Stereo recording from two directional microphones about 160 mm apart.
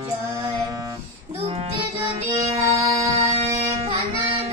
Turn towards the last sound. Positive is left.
turn(degrees=-40)  # may be behind; listen again after turning